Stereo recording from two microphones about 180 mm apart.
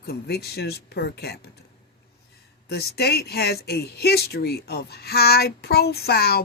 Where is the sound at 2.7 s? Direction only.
60° left (ahead or behind).